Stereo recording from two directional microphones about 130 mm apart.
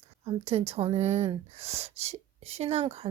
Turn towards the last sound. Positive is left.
turn(degrees=-55)  # may be behind; listen again after turning